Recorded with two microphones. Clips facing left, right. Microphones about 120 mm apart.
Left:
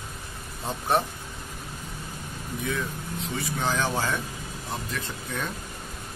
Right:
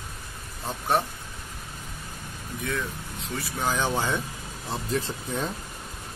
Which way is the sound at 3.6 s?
15° right (ahead or behind).